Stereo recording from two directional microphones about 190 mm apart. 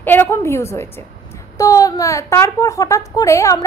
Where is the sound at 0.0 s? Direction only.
10° left (ahead or behind).